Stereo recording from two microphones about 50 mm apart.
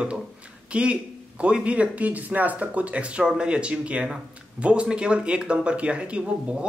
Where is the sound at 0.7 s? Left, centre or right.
Right.